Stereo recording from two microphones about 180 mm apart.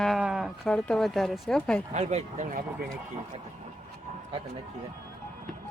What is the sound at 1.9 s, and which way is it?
Speech, 40° right (ahead or behind).